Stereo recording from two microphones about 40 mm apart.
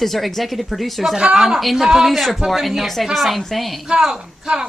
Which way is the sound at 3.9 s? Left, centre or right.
Centre.